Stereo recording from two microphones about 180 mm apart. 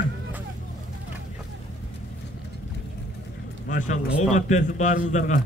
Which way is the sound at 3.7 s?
45° left (ahead or behind).